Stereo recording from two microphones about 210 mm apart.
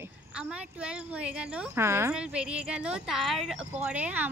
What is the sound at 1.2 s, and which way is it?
Speech, 10° right (ahead or behind).